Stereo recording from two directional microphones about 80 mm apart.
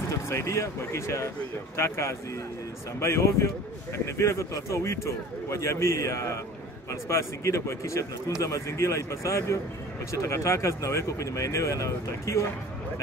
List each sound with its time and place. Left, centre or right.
0.1 s speech: left